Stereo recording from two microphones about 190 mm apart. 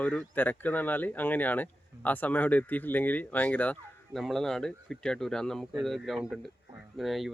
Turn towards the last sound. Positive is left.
turn(degrees=0)  # may be behind; listen again after turning